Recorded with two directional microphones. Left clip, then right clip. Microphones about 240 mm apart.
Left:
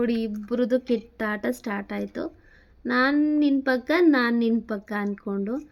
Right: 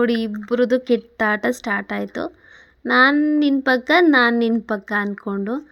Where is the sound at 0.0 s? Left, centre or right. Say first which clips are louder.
Right 6 dB; centre.